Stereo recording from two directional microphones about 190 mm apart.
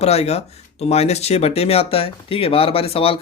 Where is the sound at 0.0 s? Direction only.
35° left (ahead or behind).